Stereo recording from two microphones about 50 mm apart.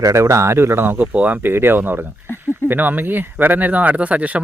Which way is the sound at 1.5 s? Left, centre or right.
Right.